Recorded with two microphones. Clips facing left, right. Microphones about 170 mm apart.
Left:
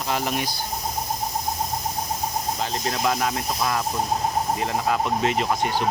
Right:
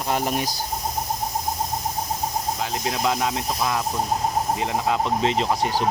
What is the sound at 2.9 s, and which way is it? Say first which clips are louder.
Speech: right 1 dB; 15° right (ahead or behind).